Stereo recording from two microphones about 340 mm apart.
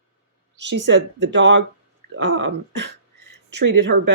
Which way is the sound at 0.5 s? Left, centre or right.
Right.